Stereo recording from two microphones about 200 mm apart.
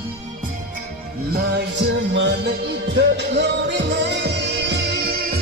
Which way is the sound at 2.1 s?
65° right (ahead or behind).